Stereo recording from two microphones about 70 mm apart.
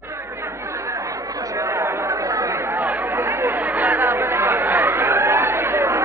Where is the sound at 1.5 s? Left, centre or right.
Right.